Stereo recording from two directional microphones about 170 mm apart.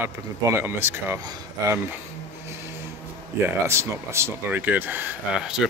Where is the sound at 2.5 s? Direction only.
15° right (ahead or behind).